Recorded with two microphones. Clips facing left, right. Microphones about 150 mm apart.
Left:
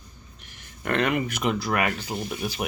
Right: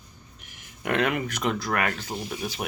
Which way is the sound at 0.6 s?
5° right (ahead or behind).